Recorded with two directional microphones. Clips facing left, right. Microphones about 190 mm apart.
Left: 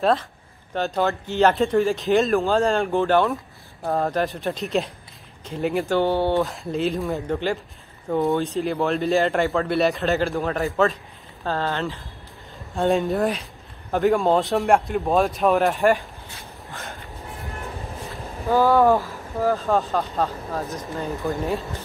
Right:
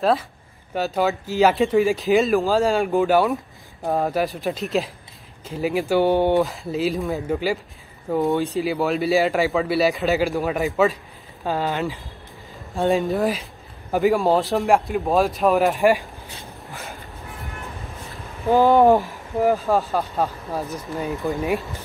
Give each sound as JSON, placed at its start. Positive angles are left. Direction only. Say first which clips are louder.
{"t": 0.0, "sound": "speech", "louder": "even", "side_deg": 0}
{"t": 5.9, "sound": "speech", "louder": "right 4 dB", "side_deg": -15}
{"t": 6.4, "sound": "speech", "louder": "right 1 dB", "side_deg": 0}
{"t": 12.7, "sound": "speech", "louder": "even", "side_deg": 0}
{"t": 16.6, "sound": "a sound", "louder": "even", "side_deg": 0}
{"t": 18.5, "sound": "speech", "louder": "right 2 dB", "side_deg": -15}